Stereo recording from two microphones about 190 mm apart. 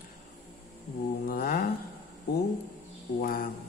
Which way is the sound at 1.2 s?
50° left (ahead or behind).